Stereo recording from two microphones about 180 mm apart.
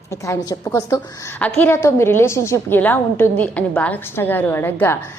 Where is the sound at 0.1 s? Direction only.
15° left (ahead or behind).